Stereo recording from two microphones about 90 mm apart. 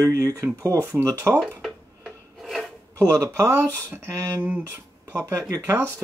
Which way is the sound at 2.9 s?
40° right (ahead or behind).